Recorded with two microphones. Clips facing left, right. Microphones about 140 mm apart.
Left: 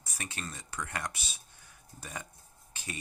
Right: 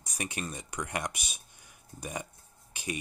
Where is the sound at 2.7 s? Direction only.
15° right (ahead or behind).